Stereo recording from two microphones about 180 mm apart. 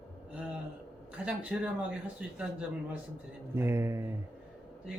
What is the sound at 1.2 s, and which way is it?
Speech, 5° right (ahead or behind).